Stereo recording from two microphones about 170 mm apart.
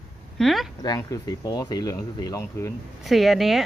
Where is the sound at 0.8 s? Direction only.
20° left (ahead or behind).